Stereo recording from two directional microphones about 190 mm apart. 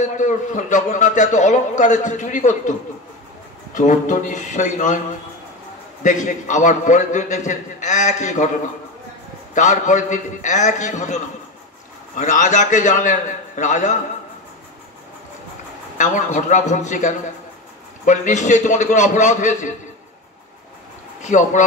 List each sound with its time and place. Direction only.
0.0 s a man's voice: 40° left (ahead or behind)
3.7 s a man's voice: 40° left (ahead or behind)
6.0 s a man's voice: 40° left (ahead or behind)
9.5 s a man's voice: 40° left (ahead or behind)
16.0 s a man's voice: 40° left (ahead or behind)
21.2 s a man's voice: 40° left (ahead or behind)